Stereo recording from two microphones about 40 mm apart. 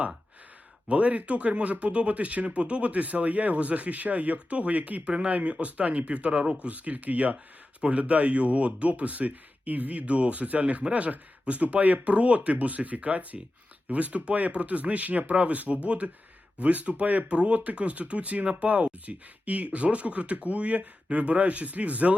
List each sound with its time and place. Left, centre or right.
0.9 s speech: right